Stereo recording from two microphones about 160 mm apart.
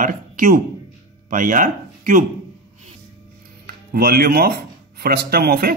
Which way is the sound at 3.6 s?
70° right (ahead or behind).